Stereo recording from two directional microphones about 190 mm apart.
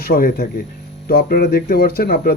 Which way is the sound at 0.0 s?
55° left (ahead or behind).